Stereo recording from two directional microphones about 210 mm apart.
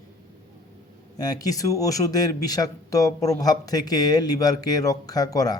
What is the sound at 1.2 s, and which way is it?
Speech, 15° left (ahead or behind).